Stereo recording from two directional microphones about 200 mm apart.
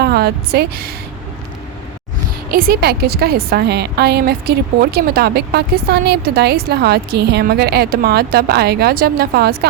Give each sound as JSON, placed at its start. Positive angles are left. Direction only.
{"t": 0.0, "sound": "a woman's voice", "side_deg": -50}
{"t": 2.5, "sound": "a woman's voice", "side_deg": -45}